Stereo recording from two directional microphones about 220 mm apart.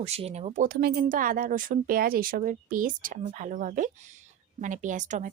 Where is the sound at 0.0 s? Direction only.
30° right (ahead or behind).